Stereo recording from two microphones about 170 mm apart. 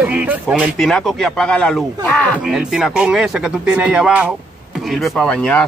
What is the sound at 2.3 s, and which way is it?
Speech, 5° right (ahead or behind).